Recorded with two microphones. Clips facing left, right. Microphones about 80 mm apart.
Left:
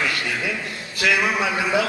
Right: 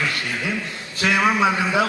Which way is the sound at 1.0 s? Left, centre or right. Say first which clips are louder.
Right 2 dB; right.